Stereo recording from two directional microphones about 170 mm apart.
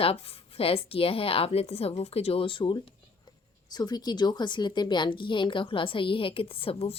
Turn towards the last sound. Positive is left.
turn(degrees=35)  # may be behind; listen again after turning